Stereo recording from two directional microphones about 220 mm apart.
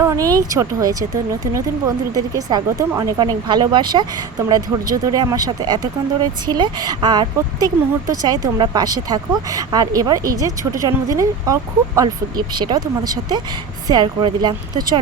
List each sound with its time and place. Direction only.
0.0 s speech: 15° right (ahead or behind)
2.1 s speech: 15° right (ahead or behind)